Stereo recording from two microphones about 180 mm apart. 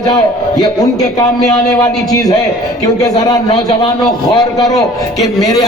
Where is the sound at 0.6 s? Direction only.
20° left (ahead or behind).